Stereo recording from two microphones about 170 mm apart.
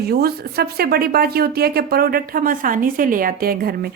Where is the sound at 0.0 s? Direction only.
65° right (ahead or behind).